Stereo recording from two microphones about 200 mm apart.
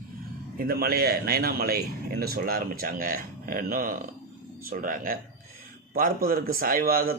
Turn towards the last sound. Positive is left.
turn(degrees=-45)  # may be behind; listen again after turning